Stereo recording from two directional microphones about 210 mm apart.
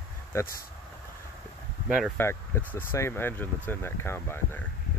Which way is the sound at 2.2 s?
10° left (ahead or behind).